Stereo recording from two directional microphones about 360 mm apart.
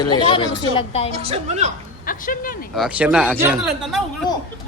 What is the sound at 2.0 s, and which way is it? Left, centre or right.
Speech, left.